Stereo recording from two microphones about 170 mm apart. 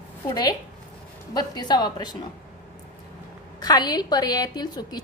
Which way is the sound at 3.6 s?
25° left (ahead or behind).